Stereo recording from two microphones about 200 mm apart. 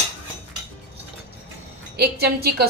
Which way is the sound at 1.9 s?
55° right (ahead or behind).